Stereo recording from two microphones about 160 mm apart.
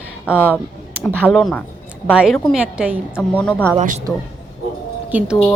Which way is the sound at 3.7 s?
50° right (ahead or behind).